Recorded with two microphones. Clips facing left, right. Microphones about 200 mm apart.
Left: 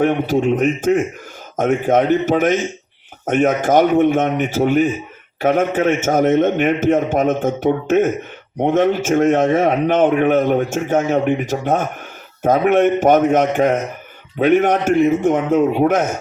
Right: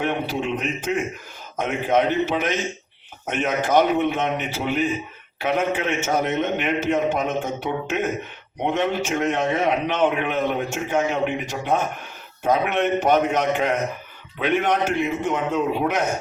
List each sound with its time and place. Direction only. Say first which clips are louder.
0.0 s a man's voice: left 9 dB; 45° left (ahead or behind)